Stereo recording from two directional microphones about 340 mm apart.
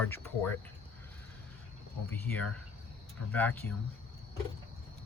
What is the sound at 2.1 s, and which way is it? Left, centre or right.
Speech, centre.